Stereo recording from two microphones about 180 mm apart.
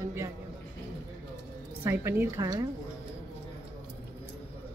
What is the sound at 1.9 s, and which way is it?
Speech, 15° right (ahead or behind).